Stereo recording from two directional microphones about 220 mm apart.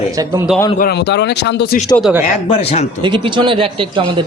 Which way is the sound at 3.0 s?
20° right (ahead or behind).